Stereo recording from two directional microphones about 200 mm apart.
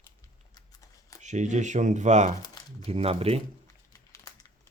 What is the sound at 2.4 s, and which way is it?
Crumpling, 20° left (ahead or behind).